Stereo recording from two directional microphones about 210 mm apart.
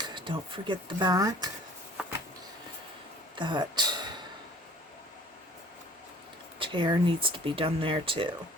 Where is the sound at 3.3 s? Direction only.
20° right (ahead or behind).